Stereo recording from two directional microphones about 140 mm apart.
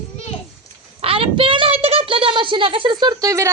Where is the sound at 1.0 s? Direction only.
40° right (ahead or behind).